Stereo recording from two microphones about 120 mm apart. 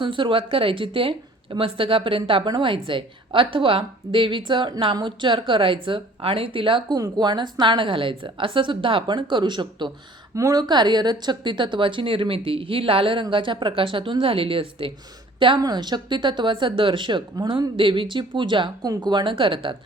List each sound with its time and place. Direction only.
0.0 s a woman's voice: 45° right (ahead or behind)
6.9 s a woman's voice: 35° right (ahead or behind)
10.3 s a woman's voice: 30° right (ahead or behind); by 19.7 s 45° right (ahead or behind)